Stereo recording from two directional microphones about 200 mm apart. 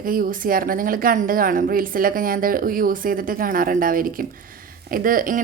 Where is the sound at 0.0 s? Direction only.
45° right (ahead or behind).